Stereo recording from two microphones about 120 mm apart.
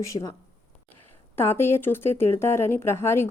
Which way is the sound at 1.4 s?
20° left (ahead or behind).